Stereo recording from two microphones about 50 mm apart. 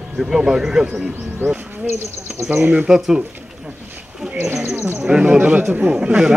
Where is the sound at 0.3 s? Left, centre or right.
Centre.